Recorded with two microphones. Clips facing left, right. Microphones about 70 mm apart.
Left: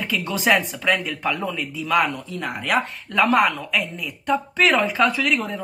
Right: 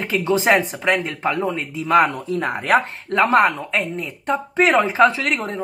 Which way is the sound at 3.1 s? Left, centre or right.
Right.